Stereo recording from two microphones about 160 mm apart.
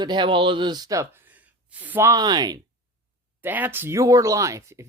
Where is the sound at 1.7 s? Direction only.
10° right (ahead or behind).